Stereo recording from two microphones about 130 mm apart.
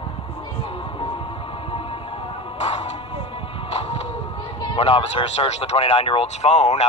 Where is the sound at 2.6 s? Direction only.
55° left (ahead or behind).